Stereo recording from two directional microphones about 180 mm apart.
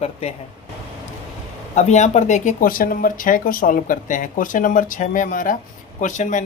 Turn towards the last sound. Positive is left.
turn(degrees=45)  # may be behind; listen again after turning